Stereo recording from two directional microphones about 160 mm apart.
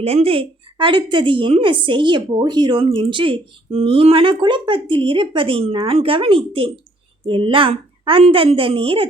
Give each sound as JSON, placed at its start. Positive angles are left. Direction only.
{"t": 0.0, "sound": "a woman's voice", "side_deg": -40}